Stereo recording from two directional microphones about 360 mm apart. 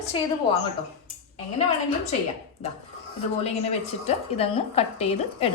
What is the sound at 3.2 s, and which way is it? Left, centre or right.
A woman's voice, centre.